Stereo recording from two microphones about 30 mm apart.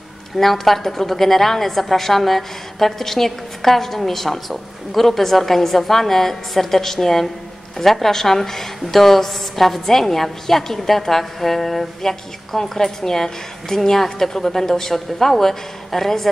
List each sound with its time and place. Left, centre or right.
0.4 s a woman's voice: centre